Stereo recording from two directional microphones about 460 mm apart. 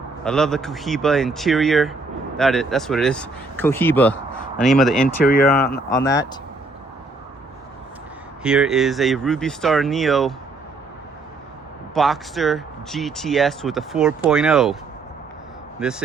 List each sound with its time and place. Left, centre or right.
0.3 s speech: centre
5.0 s speech: centre
8.4 s speech: centre
11.9 s speech: centre
15.8 s speech: centre